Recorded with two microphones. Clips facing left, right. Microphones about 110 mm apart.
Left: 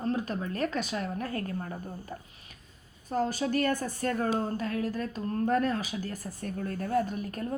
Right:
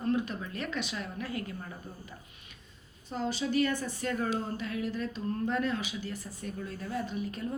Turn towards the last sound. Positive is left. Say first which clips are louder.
# left 5 dB
turn(degrees=45)  # may be behind; listen again after turning